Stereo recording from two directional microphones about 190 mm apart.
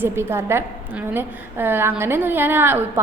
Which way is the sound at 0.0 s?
15° right (ahead or behind).